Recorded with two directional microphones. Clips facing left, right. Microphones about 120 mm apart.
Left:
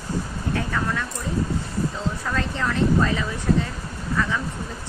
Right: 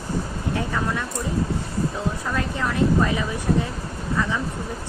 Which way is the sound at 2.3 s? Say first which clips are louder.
Left 1 dB; 15° right (ahead or behind).